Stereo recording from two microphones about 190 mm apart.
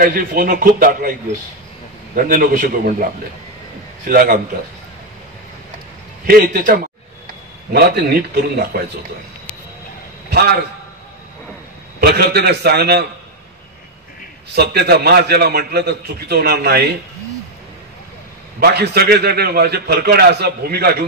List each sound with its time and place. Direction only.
0.0 s a man's voice: 45° right (ahead or behind)
2.1 s a man's voice: 45° right (ahead or behind)
4.1 s a man's voice: 50° right (ahead or behind)
6.2 s a man's voice: 50° right (ahead or behind)
10.3 s a man's voice: 55° right (ahead or behind)
12.0 s a man's voice: 55° right (ahead or behind)
14.5 s a man's voice: 60° right (ahead or behind)
18.6 s a man's voice: 60° right (ahead or behind)